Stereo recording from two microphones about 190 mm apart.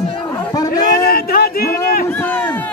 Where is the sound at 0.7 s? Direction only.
50° left (ahead or behind).